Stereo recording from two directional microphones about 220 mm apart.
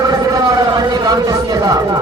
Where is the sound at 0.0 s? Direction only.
15° right (ahead or behind).